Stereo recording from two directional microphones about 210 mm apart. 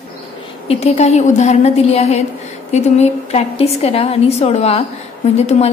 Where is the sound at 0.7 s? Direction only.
30° left (ahead or behind).